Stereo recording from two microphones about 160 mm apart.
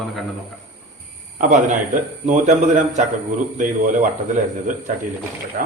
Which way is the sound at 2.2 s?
50° right (ahead or behind).